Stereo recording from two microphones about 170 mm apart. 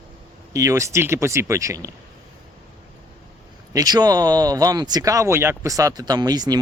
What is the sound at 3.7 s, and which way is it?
Speech, 20° right (ahead or behind).